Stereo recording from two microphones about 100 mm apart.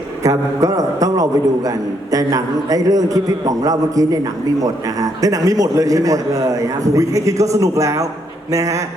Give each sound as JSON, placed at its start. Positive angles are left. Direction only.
{"t": 0.2, "sound": "a man's voice", "side_deg": -35}